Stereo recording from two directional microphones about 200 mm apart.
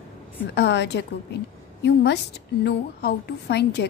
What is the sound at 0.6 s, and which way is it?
A woman's voice, 60° left (ahead or behind).